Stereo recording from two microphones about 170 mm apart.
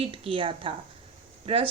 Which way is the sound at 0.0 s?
30° right (ahead or behind).